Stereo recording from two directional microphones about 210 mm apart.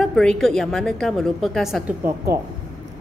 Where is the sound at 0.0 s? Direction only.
5° left (ahead or behind).